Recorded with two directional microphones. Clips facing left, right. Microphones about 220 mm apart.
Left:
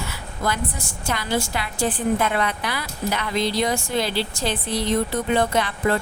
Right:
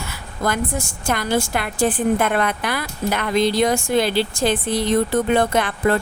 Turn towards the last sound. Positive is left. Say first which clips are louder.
# right 3 dB
turn(degrees=-50)  # may be behind; listen again after turning